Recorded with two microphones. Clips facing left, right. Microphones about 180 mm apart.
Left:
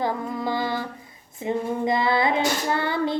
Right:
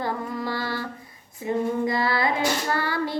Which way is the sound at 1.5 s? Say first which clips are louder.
Even; 20° left (ahead or behind).